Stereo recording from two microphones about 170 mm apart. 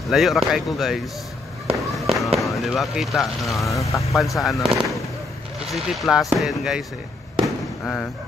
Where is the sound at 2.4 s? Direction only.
Centre (ahead or behind).